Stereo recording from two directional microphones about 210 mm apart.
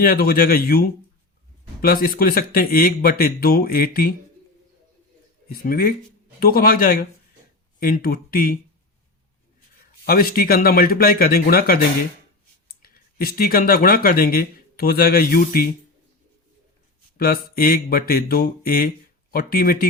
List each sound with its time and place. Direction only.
0.0 s speech: 45° left (ahead or behind)
5.5 s speech: 45° left (ahead or behind)
10.1 s speech: 45° left (ahead or behind)
12.8 s speech: 45° left (ahead or behind)
17.2 s speech: 45° left (ahead or behind)